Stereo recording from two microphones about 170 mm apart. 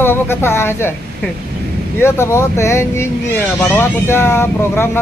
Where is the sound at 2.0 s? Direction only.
15° left (ahead or behind).